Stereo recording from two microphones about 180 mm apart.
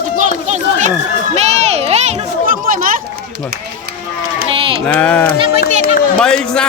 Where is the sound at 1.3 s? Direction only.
35° right (ahead or behind).